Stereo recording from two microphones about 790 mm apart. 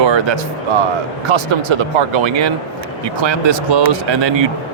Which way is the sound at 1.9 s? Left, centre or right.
Right.